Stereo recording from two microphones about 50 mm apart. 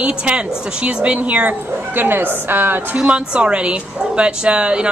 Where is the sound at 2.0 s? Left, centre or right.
Right.